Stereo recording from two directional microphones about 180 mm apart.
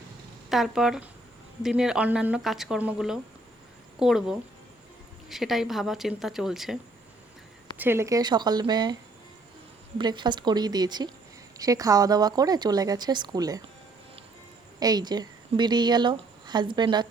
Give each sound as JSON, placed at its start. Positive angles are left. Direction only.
{"t": 0.5, "sound": "speech", "side_deg": 0}
{"t": 7.8, "sound": "speech", "side_deg": -15}
{"t": 10.0, "sound": "speech", "side_deg": -25}
{"t": 14.8, "sound": "a woman's voice", "side_deg": -20}